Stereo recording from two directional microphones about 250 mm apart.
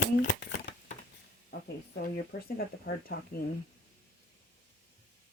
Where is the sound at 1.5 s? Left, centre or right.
Left.